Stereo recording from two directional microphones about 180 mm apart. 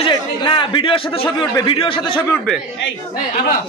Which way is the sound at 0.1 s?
25° left (ahead or behind).